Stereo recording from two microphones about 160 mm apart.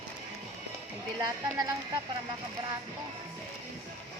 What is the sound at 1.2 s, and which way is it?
Speech, 25° right (ahead or behind).